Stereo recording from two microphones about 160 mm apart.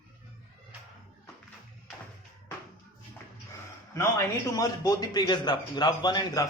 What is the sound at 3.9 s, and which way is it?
A man's voice, 15° left (ahead or behind).